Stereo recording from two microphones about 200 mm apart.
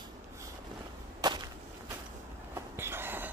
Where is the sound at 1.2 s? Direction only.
20° right (ahead or behind).